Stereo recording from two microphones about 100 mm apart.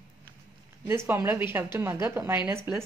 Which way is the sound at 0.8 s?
25° right (ahead or behind).